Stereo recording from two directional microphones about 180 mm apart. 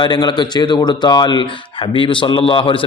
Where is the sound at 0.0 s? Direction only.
25° left (ahead or behind).